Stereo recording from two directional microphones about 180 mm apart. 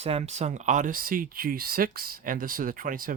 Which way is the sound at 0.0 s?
35° right (ahead or behind).